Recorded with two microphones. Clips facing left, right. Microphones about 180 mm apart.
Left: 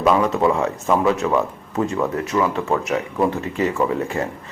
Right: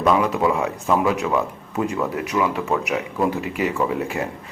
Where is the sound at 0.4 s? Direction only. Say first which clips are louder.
Left 2 dB; 5° right (ahead or behind).